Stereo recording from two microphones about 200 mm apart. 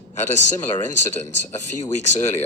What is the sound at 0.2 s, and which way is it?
Speech, 35° left (ahead or behind).